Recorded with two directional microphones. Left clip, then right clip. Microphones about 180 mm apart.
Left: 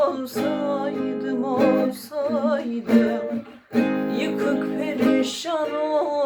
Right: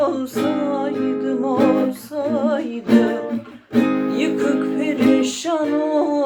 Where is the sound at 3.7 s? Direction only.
15° right (ahead or behind).